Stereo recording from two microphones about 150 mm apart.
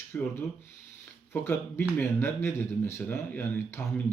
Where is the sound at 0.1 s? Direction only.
10° left (ahead or behind).